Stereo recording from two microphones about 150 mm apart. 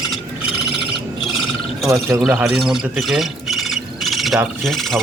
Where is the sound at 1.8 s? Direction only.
20° right (ahead or behind).